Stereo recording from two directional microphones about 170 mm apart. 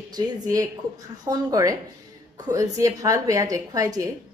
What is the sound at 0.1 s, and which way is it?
A woman's voice, 20° right (ahead or behind).